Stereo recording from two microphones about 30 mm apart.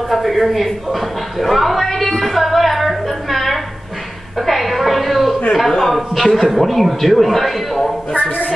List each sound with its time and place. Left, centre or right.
0.1 s a sound: centre
5.7 s a man's voice: centre
8.2 s a man's voice: left